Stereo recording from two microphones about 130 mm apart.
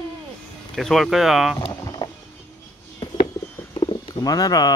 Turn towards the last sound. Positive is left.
turn(degrees=30)  # may be behind; listen again after turning